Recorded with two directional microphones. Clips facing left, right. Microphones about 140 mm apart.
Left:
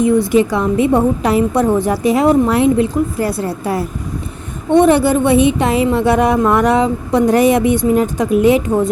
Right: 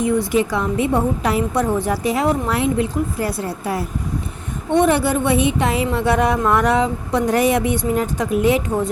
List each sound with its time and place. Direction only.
0.0 s a woman's voice: 25° left (ahead or behind)
3.2 s a woman's voice: 40° left (ahead or behind)
4.8 s a woman's voice: 25° left (ahead or behind)